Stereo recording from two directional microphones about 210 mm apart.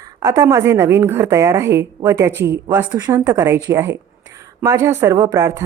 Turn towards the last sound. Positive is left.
turn(degrees=-15)  # may be behind; listen again after turning